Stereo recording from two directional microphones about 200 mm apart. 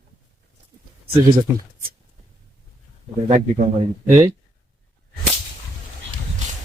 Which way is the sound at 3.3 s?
35° right (ahead or behind).